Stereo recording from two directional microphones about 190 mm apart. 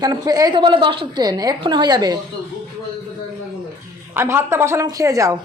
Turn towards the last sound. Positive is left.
turn(degrees=-15)  # may be behind; listen again after turning